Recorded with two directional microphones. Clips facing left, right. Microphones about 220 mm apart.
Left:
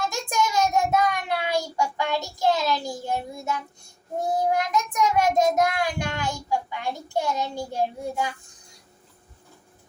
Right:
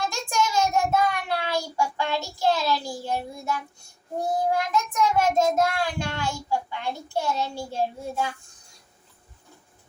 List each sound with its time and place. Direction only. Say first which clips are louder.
0.1 s child singing: even; 20° left (ahead or behind)
4.7 s child singing: even; 15° left (ahead or behind)